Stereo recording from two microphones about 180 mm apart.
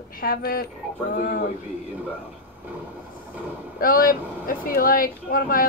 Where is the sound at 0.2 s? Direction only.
55° left (ahead or behind).